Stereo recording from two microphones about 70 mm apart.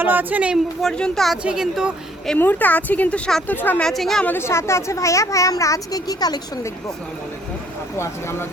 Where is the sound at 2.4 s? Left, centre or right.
Left.